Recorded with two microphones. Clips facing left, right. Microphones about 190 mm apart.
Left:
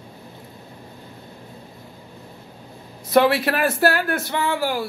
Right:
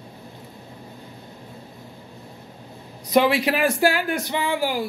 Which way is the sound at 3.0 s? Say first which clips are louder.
Left 2 dB; 15° right (ahead or behind).